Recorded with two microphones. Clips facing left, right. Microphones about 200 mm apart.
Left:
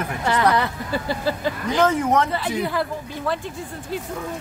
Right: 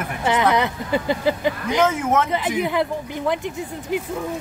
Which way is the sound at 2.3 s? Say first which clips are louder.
Right 2 dB; 15° right (ahead or behind).